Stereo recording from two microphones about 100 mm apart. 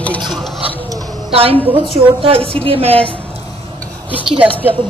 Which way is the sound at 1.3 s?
70° right (ahead or behind).